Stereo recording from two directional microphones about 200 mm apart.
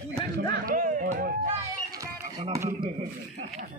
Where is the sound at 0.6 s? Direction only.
40° right (ahead or behind).